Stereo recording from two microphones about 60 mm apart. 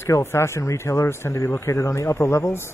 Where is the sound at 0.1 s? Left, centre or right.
Left.